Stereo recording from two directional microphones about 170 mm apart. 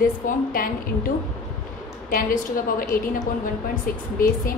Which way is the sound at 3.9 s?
55° left (ahead or behind).